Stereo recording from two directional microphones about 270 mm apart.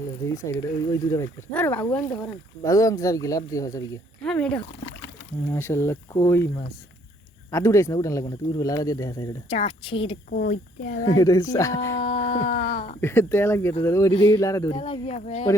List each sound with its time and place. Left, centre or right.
0.3 s speech: centre
10.2 s speech: left
11.0 s speech: centre
12.0 s a sound: left
13.0 s speech: centre; by 15.4 s left